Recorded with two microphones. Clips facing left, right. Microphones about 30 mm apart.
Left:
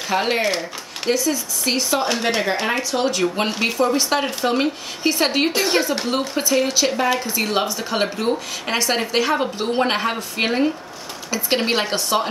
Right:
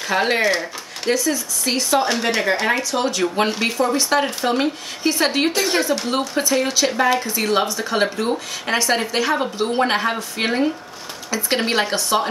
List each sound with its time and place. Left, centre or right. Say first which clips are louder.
0.1 s speech: right 2 dB; centre